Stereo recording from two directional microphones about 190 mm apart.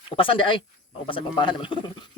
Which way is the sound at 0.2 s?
25° left (ahead or behind).